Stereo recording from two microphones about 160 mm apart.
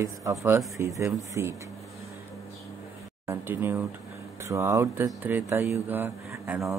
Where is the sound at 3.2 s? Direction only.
15° right (ahead or behind).